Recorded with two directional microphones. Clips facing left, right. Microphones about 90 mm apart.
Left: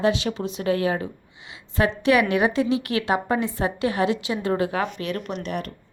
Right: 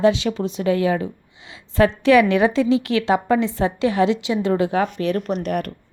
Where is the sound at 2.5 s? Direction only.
30° right (ahead or behind).